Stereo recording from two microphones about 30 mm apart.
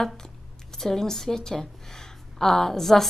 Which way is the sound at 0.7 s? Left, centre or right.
Centre.